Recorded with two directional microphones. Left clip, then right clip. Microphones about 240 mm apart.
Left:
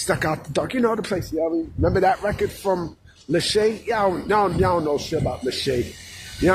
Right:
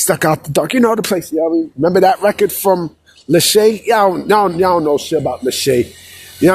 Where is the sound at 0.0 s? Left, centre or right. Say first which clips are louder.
Right 9 dB; right.